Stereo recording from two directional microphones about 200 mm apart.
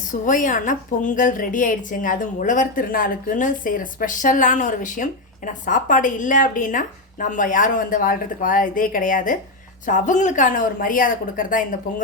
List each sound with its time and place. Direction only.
0.1 s a woman's voice: 40° left (ahead or behind)